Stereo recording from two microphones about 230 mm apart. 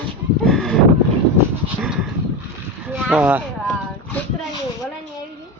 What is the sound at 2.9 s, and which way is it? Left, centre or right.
Speech, centre.